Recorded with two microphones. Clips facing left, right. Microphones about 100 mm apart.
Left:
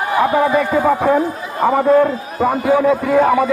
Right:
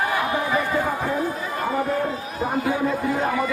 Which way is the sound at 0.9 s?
80° left.